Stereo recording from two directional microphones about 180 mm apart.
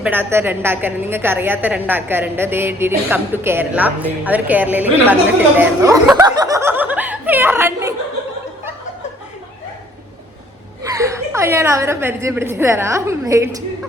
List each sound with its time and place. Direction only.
0.0 s a woman's voice: 10° right (ahead or behind)
6.1 s chuckle: 20° right (ahead or behind)
10.8 s a woman's voice: 15° right (ahead or behind)